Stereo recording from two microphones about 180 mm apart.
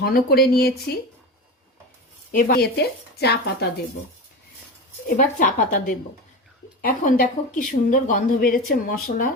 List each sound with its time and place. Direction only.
0.0 s speech: 60° left (ahead or behind)
2.5 s speech: 65° left (ahead or behind)
5.0 s a woman's voice: 45° left (ahead or behind)